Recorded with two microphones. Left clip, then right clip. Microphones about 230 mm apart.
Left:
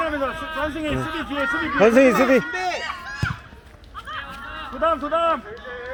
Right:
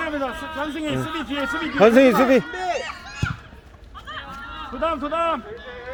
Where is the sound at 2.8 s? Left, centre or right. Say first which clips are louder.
Left 2 dB; centre.